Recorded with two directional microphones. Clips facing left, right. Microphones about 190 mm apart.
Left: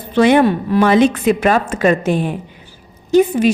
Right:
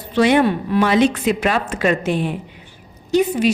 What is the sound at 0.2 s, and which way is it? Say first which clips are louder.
A woman's voice: left 3 dB; 45° left (ahead or behind).